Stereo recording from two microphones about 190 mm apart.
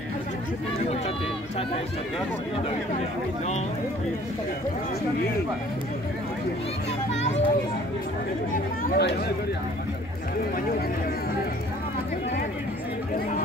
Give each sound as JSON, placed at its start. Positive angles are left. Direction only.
{"t": 7.2, "sound": "a child's voice", "side_deg": 35}
{"t": 8.8, "sound": "speech", "side_deg": 55}